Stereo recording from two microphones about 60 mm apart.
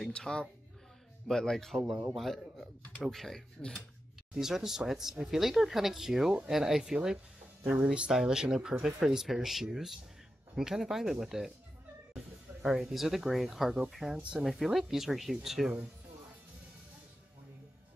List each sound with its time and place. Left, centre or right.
0.0 s speech: centre
4.4 s speech: centre
12.6 s speech: centre